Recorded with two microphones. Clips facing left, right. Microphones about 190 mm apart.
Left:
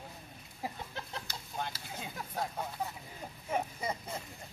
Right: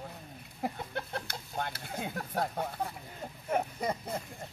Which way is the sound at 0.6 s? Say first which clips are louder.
Right 5 dB; 60° right (ahead or behind).